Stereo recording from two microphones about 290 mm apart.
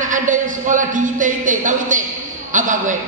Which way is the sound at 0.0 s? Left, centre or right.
Right.